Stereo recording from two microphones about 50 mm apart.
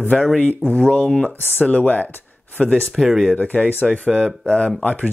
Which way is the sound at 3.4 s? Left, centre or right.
Left.